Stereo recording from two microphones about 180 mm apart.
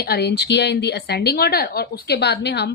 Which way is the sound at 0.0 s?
65° left (ahead or behind).